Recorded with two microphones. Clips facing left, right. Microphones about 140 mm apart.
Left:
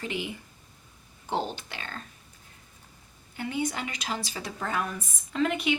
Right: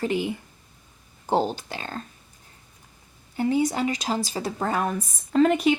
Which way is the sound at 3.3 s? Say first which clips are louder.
Right 8 dB; 35° right (ahead or behind).